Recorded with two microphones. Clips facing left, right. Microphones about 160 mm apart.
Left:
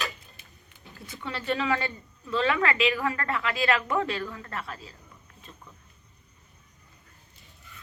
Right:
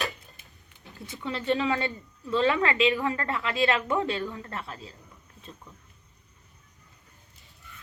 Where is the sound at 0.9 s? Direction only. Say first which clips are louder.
Right 3 dB; 20° right (ahead or behind).